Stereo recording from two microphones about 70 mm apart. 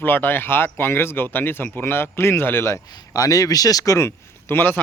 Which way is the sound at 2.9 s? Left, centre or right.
Left.